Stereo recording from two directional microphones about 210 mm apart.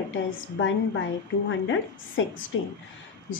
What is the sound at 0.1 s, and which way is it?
A woman's voice, 65° left (ahead or behind).